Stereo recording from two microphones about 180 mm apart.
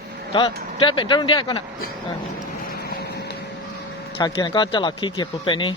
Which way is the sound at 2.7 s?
60° left (ahead or behind).